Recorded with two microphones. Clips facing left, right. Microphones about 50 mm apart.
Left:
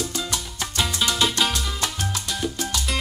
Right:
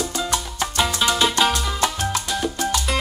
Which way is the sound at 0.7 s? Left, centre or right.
Centre.